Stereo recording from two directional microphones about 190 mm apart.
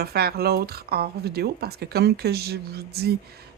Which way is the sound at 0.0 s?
55° right (ahead or behind).